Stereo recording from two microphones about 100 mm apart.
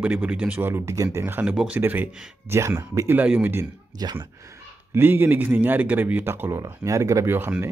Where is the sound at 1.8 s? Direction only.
20° right (ahead or behind).